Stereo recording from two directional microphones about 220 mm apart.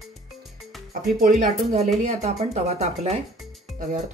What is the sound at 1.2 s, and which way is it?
Speech, 35° right (ahead or behind).